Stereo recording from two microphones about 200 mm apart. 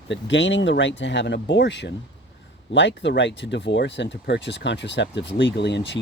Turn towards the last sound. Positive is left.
turn(degrees=60)  # may be behind; listen again after turning